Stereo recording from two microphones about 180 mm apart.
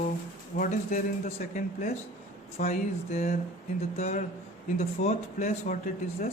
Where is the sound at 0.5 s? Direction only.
50° left (ahead or behind).